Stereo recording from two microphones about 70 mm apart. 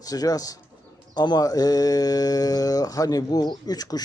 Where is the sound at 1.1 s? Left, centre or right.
Left.